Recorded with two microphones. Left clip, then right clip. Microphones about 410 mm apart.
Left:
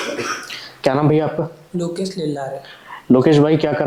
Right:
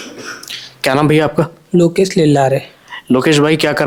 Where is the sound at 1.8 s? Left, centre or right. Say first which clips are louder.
Right 12 dB; right.